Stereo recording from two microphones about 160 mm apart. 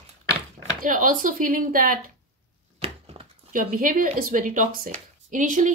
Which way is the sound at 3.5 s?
60° right (ahead or behind).